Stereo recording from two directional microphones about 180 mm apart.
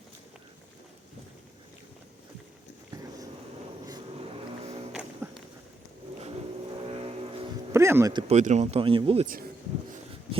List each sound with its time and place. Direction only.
2.9 s dog: 20° right (ahead or behind)
3.8 s vehicle: 25° right (ahead or behind)
4.9 s music: 5° right (ahead or behind)
6.2 s vehicle: 30° right (ahead or behind)
7.7 s speech: 15° right (ahead or behind)
8.3 s speech: 40° right (ahead or behind)